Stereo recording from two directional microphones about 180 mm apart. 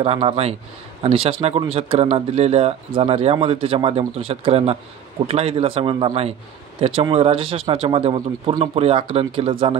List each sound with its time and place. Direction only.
0.0 s a man's voice: 35° right (ahead or behind)